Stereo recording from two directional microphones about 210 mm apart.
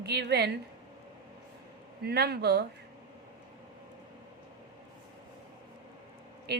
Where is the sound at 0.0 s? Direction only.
50° right (ahead or behind).